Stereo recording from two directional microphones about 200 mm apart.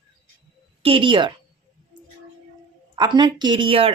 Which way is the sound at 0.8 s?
25° right (ahead or behind).